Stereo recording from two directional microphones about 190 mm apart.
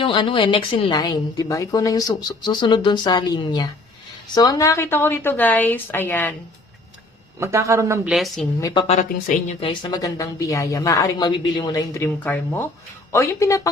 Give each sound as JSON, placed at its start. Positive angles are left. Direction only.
{"t": 0.0, "sound": "a woman's voice", "side_deg": 25}
{"t": 7.3, "sound": "a man's voice", "side_deg": -15}
{"t": 8.1, "sound": "speech", "side_deg": 0}
{"t": 8.9, "sound": "a woman's voice", "side_deg": 40}
{"t": 9.6, "sound": "a woman's voice", "side_deg": 25}